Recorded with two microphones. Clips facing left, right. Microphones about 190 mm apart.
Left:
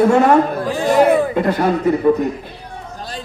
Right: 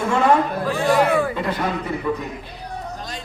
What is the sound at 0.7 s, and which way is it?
Speech, 20° left (ahead or behind).